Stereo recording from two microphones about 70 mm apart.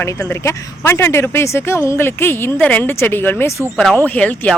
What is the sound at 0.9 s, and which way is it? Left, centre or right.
Speech, left.